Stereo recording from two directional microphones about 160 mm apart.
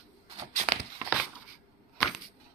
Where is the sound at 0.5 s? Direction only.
45° right (ahead or behind).